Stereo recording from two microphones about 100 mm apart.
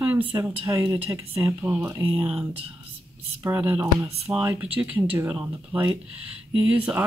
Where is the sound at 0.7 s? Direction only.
30° right (ahead or behind).